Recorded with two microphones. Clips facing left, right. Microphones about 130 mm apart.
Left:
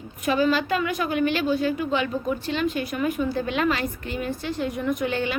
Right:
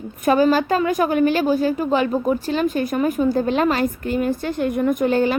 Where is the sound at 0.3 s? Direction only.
40° right (ahead or behind).